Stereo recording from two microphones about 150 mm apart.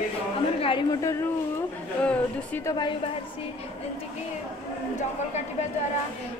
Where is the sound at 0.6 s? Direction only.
35° left (ahead or behind).